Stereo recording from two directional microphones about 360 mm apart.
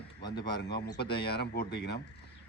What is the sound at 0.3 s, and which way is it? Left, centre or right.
Speech, left.